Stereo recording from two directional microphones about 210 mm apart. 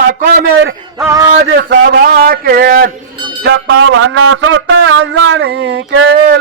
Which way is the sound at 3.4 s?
60° right (ahead or behind).